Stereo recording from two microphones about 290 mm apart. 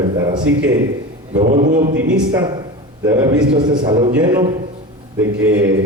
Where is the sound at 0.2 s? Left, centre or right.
Centre.